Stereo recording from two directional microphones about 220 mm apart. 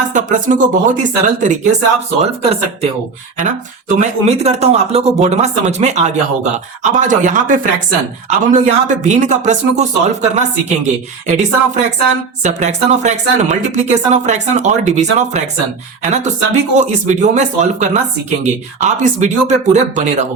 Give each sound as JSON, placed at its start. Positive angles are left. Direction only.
{"t": 0.1, "sound": "speech", "side_deg": -35}